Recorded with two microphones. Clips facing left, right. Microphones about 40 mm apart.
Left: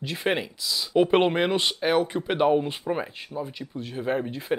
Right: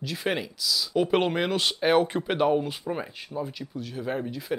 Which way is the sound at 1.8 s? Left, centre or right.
Centre.